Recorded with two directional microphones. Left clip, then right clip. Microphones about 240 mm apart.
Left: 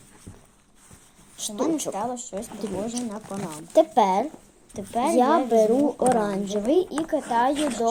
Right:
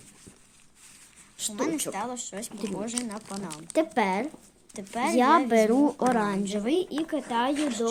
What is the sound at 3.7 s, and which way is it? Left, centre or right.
Speech, centre.